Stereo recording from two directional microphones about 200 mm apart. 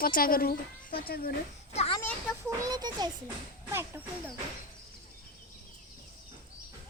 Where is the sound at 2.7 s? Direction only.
20° right (ahead or behind).